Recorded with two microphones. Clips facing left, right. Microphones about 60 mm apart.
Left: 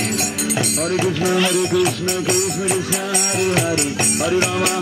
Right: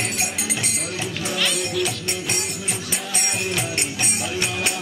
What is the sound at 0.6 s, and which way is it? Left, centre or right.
Speech, left.